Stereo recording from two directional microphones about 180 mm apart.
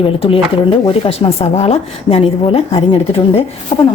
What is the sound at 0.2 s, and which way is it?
Speech, 30° left (ahead or behind).